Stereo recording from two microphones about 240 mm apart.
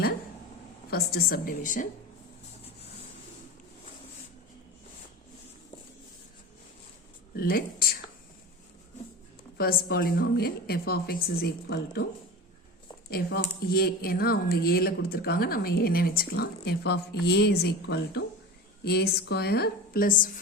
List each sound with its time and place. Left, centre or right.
0.9 s speech: left
7.3 s a sound: left
9.6 s speech: left
13.1 s speech: left